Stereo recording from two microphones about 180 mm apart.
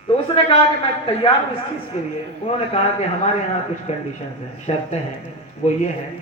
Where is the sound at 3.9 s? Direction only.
35° left (ahead or behind).